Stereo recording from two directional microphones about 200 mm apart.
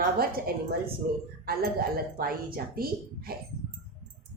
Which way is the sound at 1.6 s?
50° right (ahead or behind).